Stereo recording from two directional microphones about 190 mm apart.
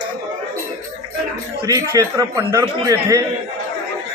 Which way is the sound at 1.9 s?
20° right (ahead or behind).